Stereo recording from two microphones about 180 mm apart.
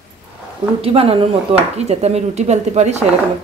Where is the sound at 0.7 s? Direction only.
30° right (ahead or behind).